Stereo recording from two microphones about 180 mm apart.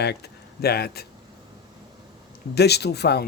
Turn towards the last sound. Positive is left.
turn(degrees=65)  # may be behind; listen again after turning